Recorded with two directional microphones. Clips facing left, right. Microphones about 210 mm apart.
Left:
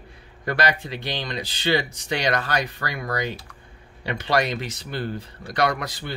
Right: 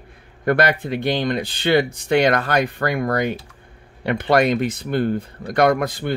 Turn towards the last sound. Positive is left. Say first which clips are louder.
# right 7 dB
turn(degrees=-50)  # may be behind; listen again after turning